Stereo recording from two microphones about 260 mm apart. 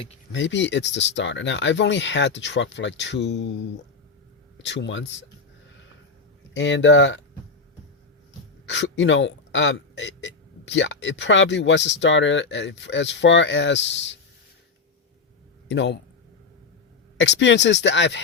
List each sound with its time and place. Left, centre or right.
0.3 s speech: left
4.5 s speech: left
6.5 s speech: left
8.6 s speech: left
15.7 s speech: left
17.2 s speech: left